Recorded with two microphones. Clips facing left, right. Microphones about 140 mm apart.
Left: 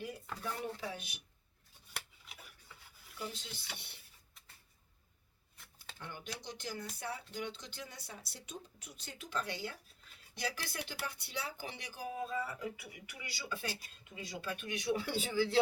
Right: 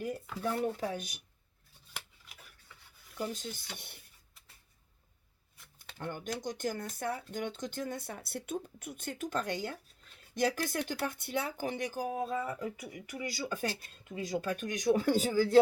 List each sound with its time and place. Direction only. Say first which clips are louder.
0.4 s speech: right 8 dB; 45° right (ahead or behind)
3.2 s speech: right 7 dB; 45° right (ahead or behind)
6.0 s speech: right 9 dB; 50° right (ahead or behind)